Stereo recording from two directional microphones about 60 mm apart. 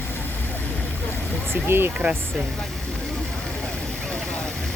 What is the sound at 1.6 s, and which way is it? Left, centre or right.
Speech, right.